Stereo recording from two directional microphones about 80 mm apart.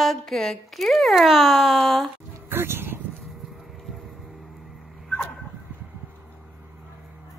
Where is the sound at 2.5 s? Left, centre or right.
Right.